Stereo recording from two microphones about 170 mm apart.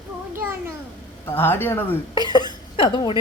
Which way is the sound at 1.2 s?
15° left (ahead or behind).